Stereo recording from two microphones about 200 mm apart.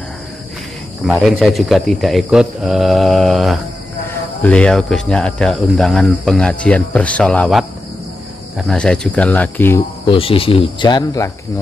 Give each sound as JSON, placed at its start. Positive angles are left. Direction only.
{"t": 1.0, "sound": "speech", "side_deg": 0}
{"t": 10.0, "sound": "speech", "side_deg": 25}